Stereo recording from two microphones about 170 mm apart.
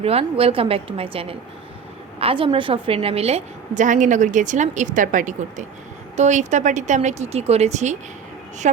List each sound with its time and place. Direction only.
0.0 s a woman's voice: 35° right (ahead or behind)